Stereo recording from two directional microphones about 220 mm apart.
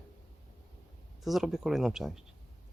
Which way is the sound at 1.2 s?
Centre (ahead or behind).